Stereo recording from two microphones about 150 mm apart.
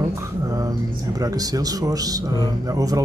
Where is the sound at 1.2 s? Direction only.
25° right (ahead or behind).